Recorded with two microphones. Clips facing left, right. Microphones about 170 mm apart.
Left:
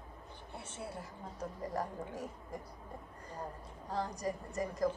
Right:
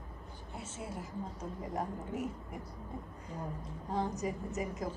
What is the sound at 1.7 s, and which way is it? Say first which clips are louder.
Speech: right 4 dB; 20° right (ahead or behind).